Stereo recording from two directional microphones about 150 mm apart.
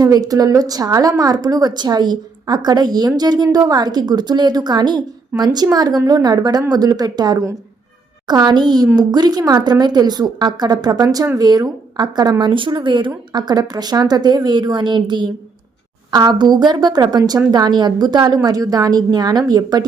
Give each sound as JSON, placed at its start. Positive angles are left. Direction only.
{"t": 0.0, "sound": "a woman's voice", "side_deg": -25}